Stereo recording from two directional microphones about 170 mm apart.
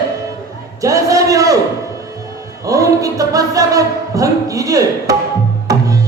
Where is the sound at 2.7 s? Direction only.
20° right (ahead or behind).